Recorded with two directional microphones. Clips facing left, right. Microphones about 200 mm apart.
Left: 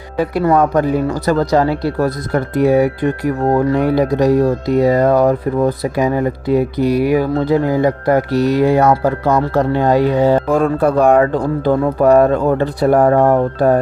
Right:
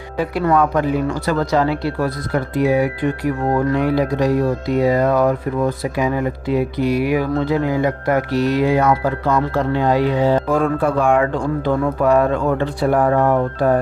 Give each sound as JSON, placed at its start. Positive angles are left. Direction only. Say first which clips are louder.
{"t": 0.5, "sound": "speech", "louder": "left 2 dB", "side_deg": 40}